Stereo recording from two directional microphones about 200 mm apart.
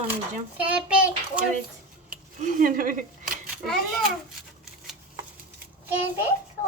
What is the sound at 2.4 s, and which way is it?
Speech, 45° right (ahead or behind).